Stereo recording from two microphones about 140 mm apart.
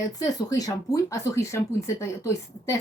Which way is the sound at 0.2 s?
25° left (ahead or behind).